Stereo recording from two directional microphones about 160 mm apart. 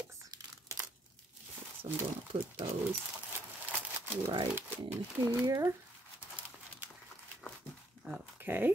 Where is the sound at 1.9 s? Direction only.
30° right (ahead or behind).